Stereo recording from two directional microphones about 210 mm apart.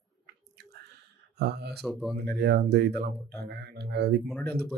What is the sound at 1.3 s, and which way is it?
Speech, 50° right (ahead or behind).